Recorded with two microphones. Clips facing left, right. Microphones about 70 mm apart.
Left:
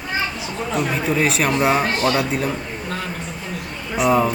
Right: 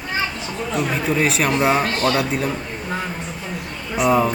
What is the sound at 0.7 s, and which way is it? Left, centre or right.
Speech, centre.